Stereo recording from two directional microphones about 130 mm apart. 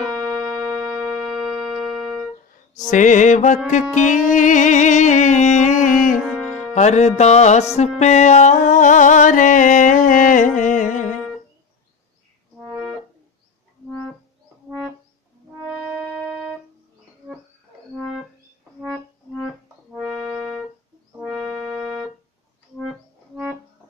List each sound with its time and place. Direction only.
0.0 s music: 5° right (ahead or behind)
2.9 s music: 70° left (ahead or behind)
6.2 s music: 5° right (ahead or behind)
6.7 s music: 60° left (ahead or behind)
17.9 s music: centre (ahead or behind)
19.9 s music: 5° right (ahead or behind)